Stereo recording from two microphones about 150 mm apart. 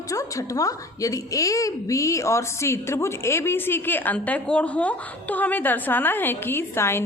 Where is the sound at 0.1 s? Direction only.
20° left (ahead or behind).